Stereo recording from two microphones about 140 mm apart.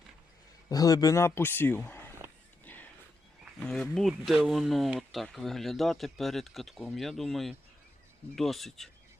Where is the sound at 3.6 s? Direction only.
5° left (ahead or behind).